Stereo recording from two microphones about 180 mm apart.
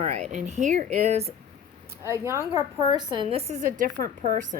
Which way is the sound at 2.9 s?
25° right (ahead or behind).